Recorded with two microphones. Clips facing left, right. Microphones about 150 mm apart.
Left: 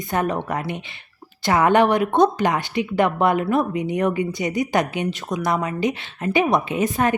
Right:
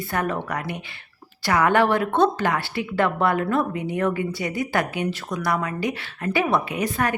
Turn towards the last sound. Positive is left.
turn(degrees=20)  # may be behind; listen again after turning